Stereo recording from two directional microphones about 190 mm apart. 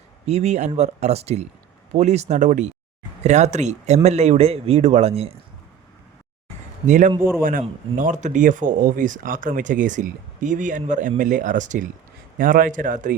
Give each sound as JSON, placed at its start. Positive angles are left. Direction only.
{"t": 0.3, "sound": "speech", "side_deg": -35}
{"t": 6.8, "sound": "speech", "side_deg": -40}